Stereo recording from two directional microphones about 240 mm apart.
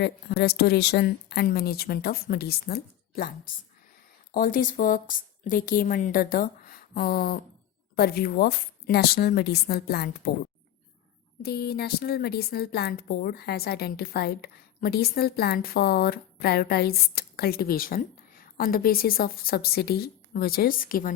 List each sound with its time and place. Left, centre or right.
0.0 s a woman's voice: left
4.4 s a woman's voice: left
11.4 s a woman's voice: left